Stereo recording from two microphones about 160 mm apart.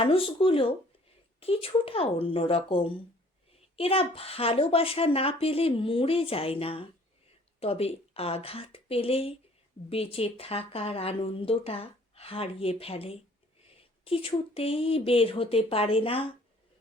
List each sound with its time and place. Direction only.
0.0 s speech: 35° left (ahead or behind)